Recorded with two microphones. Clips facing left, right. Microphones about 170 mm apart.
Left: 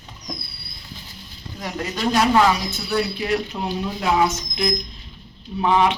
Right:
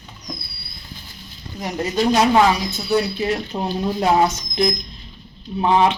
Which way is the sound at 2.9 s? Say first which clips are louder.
Right 2 dB; 25° right (ahead or behind).